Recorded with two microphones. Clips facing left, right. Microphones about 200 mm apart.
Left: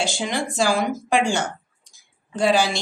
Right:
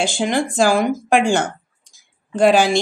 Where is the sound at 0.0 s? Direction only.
55° right (ahead or behind).